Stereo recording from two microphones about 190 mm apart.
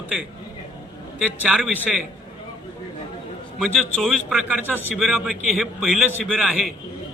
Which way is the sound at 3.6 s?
Centre (ahead or behind).